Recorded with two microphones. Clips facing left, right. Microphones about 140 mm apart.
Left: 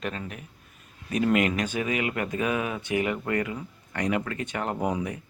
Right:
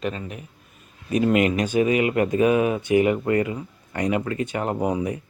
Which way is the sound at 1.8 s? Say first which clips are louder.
Right 13 dB; 25° right (ahead or behind).